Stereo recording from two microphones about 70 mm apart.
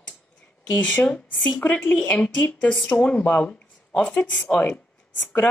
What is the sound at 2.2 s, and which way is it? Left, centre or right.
Speech, centre.